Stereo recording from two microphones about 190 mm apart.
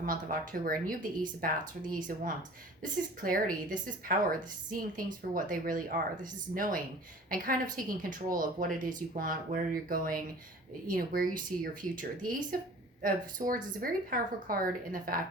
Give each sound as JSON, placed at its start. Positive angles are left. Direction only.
{"t": 0.0, "sound": "a woman's voice", "side_deg": -45}